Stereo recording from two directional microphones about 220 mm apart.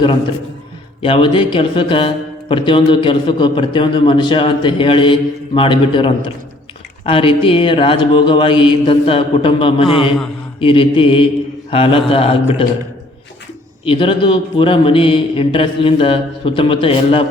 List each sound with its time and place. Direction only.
1.0 s a man's voice: 25° left (ahead or behind)
13.8 s a man's voice: 25° left (ahead or behind)